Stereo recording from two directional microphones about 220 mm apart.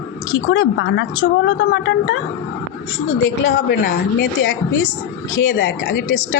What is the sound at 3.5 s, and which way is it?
Speech, 45° left (ahead or behind).